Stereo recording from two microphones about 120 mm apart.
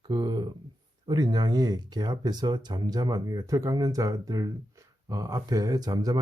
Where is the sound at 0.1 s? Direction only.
35° right (ahead or behind).